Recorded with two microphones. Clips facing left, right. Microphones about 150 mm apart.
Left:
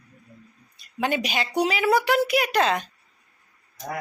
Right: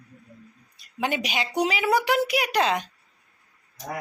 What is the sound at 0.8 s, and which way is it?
A woman's voice, 15° right (ahead or behind).